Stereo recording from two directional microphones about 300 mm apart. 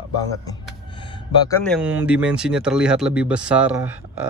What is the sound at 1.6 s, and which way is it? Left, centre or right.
Speech, centre.